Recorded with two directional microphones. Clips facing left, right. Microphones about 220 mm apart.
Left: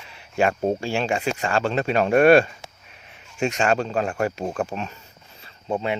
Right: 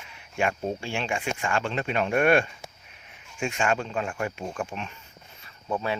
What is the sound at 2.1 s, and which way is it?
Speech, 90° left.